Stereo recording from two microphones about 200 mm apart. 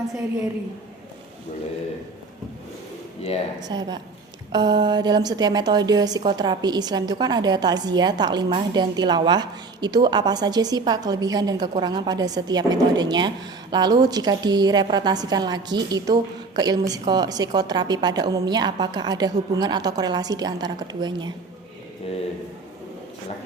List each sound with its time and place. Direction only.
3.6 s a woman's voice: 20° right (ahead or behind)